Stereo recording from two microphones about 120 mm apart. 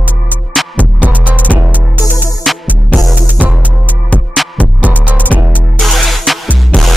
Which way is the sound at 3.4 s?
15° right (ahead or behind).